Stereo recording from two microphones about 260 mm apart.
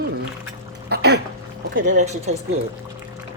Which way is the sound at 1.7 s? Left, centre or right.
Right.